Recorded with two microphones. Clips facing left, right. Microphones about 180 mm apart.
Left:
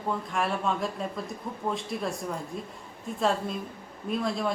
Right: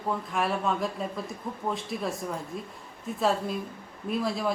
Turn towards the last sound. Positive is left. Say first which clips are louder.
# even
turn(degrees=-5)  # may be behind; listen again after turning